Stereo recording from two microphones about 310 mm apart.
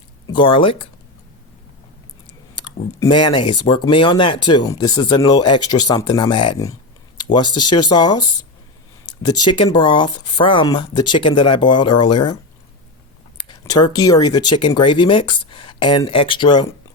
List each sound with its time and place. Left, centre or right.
0.3 s speech: centre
2.6 s speech: centre
7.2 s a sound: centre
7.5 s speech: centre
9.4 s speech: centre
13.3 s a sound: centre
14.0 s speech: centre